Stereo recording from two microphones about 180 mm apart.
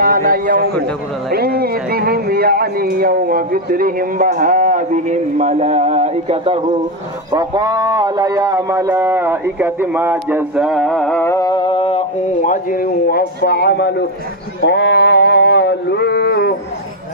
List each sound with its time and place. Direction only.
0.0 s a man's voice: 55° right (ahead or behind); by 6.6 s 35° right (ahead or behind)
7.2 s speech: 20° right (ahead or behind); by 12.0 s 30° left (ahead or behind)
12.3 s a man's voice: 50° left (ahead or behind); by 14.0 s 65° left (ahead or behind)
14.6 s a sound: 70° left (ahead or behind)